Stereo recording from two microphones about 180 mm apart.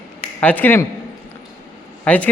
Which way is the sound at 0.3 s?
10° left (ahead or behind).